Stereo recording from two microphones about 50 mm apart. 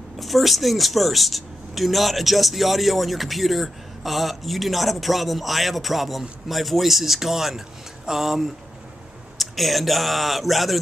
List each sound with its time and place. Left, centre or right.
0.2 s speech: centre